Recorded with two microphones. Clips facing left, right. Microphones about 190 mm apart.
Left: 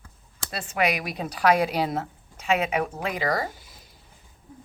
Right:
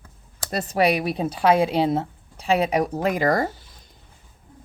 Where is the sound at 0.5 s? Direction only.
40° right (ahead or behind).